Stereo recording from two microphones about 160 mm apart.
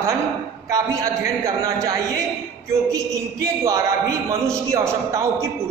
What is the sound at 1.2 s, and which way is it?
A man's voice, 20° right (ahead or behind).